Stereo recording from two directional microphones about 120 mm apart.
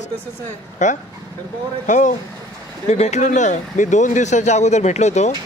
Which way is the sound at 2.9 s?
65° left (ahead or behind).